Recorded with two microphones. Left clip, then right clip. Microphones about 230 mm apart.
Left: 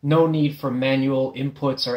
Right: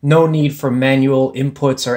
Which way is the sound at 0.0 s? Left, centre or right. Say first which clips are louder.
Right 6 dB; right.